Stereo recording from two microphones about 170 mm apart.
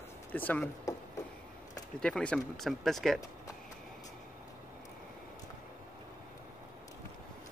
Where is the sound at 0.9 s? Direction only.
20° left (ahead or behind).